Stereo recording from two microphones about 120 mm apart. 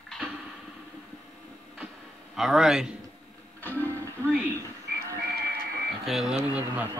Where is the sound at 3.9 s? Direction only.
20° right (ahead or behind).